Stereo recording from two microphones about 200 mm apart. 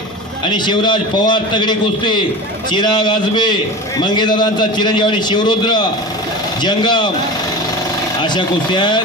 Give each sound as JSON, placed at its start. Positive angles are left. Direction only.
{"t": 0.5, "sound": "a man's voice", "side_deg": 20}
{"t": 8.3, "sound": "a man's voice", "side_deg": 20}